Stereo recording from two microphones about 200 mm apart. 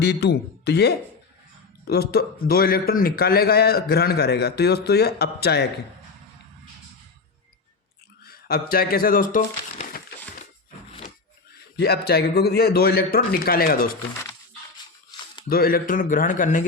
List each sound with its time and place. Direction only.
0.0 s a man's voice: 55° left (ahead or behind)
8.2 s speech: 50° left (ahead or behind)
11.8 s a man's voice: 55° left (ahead or behind)
15.4 s a man's voice: 45° left (ahead or behind)